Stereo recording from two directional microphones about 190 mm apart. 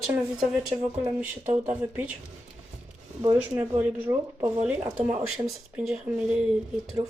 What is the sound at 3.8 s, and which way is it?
Speech, 10° right (ahead or behind).